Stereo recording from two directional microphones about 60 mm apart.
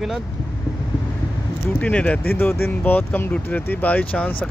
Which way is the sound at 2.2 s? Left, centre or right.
Left.